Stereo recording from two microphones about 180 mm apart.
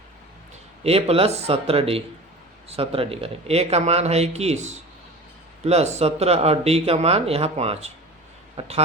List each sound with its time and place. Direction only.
0.9 s speech: 35° right (ahead or behind)